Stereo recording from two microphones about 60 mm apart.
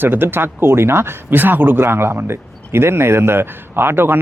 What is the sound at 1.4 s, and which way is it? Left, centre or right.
A man's voice, right.